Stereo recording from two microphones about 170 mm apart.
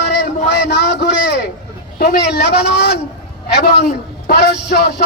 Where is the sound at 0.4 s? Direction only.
75° left (ahead or behind).